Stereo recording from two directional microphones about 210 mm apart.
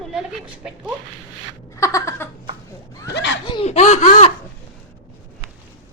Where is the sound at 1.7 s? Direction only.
15° left (ahead or behind).